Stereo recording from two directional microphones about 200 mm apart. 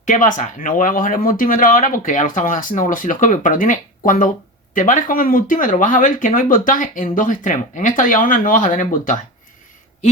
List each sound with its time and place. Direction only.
0.0 s speech: 40° left (ahead or behind)